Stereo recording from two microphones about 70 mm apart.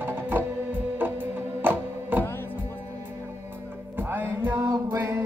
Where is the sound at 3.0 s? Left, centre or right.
Right.